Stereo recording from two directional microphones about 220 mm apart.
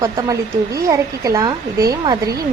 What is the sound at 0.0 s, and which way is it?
A woman's voice, 15° right (ahead or behind).